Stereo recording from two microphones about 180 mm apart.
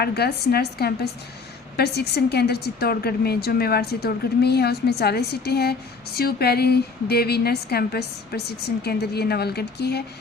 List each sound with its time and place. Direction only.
0.0 s a woman's voice: 60° left (ahead or behind)